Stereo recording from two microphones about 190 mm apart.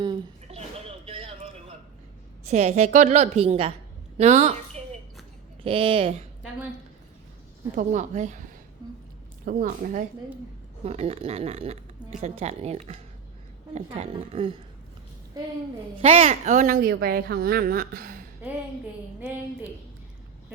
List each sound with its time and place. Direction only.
0.0 s a sound: 30° right (ahead or behind)
2.5 s speech: 35° right (ahead or behind)
5.6 s speech: 25° right (ahead or behind)
7.8 s speech: 40° right (ahead or behind)
9.5 s a woman's voice: 45° right (ahead or behind)
16.0 s a woman's voice: 30° right (ahead or behind); by 18.2 s 50° right (ahead or behind)